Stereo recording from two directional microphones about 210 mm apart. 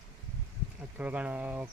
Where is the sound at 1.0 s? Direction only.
5° right (ahead or behind).